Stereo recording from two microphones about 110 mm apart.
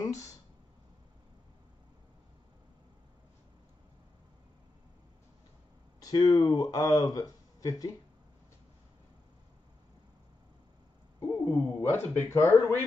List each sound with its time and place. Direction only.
0.0 s a sound: 30° left (ahead or behind)
5.9 s speech: 35° left (ahead or behind)
11.1 s speech: 20° left (ahead or behind)